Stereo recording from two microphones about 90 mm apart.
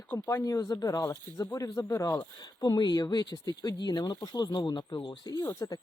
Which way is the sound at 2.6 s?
50° left (ahead or behind).